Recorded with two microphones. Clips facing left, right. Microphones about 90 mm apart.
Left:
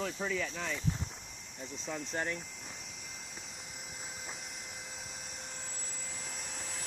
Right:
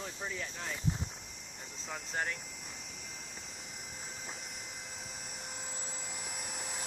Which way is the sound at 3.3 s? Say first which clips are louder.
Even; centre (ahead or behind).